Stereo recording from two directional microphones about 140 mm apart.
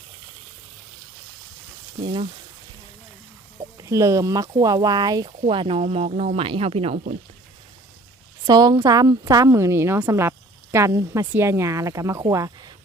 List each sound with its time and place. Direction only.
3.6 s a woman's voice: 25° right (ahead or behind)
5.8 s speech: 50° right (ahead or behind)
8.4 s a woman's voice: 25° right (ahead or behind)